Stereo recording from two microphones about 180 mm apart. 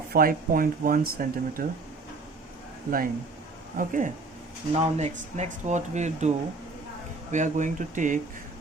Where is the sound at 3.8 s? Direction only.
45° right (ahead or behind).